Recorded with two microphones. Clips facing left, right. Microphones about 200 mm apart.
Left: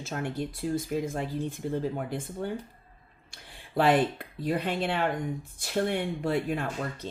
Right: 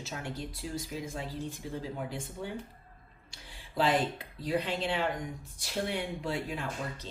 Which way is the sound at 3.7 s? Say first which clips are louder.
Left 5 dB; 60° left (ahead or behind).